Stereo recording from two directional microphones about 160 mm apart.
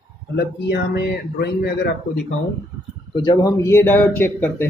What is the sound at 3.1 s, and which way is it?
Speech, 30° left (ahead or behind).